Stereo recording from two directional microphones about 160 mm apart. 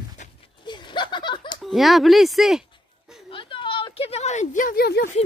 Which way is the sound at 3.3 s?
30° left (ahead or behind).